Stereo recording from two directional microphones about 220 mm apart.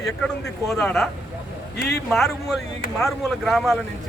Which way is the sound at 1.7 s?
45° left (ahead or behind).